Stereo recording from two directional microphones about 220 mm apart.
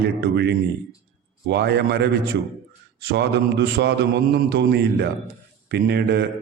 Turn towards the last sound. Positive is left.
turn(degrees=-45)  # may be behind; listen again after turning